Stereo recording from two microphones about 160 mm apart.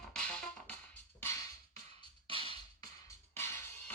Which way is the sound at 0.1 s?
5° left (ahead or behind).